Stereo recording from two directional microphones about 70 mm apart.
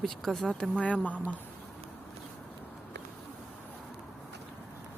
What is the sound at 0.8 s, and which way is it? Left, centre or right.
Speech, centre.